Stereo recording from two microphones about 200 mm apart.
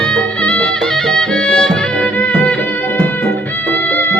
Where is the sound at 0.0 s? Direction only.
5° left (ahead or behind).